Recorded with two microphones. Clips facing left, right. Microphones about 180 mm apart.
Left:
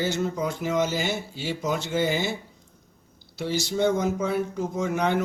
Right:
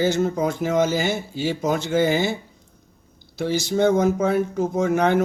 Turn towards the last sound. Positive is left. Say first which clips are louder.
# right 6 dB
turn(degrees=-50)  # may be behind; listen again after turning